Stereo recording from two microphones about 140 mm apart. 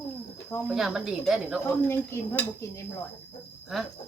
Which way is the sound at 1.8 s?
15° left (ahead or behind).